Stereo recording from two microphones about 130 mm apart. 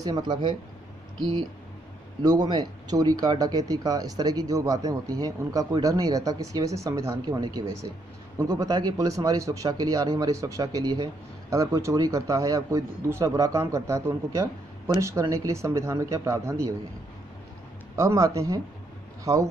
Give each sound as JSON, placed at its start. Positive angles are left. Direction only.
{"t": 0.0, "sound": "speech", "side_deg": -30}
{"t": 2.2, "sound": "speech", "side_deg": -30}
{"t": 17.9, "sound": "speech", "side_deg": -25}